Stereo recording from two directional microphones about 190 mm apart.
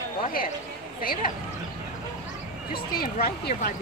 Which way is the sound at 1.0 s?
50° left (ahead or behind).